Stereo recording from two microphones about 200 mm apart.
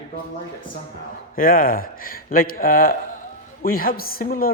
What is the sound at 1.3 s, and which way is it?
Speech, 45° left (ahead or behind).